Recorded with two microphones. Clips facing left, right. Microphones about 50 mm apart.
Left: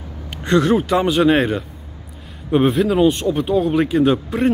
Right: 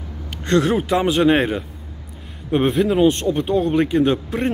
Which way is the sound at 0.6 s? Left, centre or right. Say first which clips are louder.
Left 2 dB; centre.